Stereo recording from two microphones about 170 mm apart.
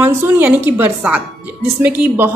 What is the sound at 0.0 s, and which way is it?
A woman's voice, 10° right (ahead or behind).